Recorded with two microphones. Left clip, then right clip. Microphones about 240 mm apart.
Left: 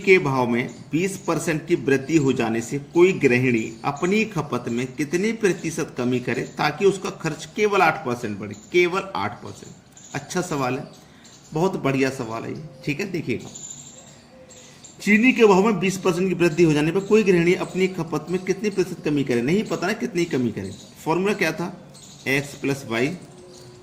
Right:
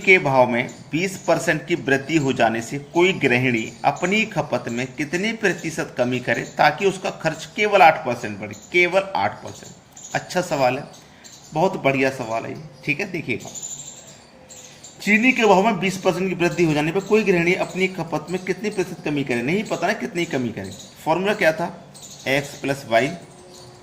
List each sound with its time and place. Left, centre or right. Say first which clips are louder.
0.0 s speech: right 3 dB; centre
15.0 s speech: even; left